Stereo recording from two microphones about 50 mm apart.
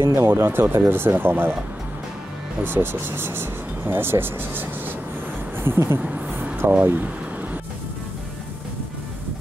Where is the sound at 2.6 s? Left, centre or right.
Right.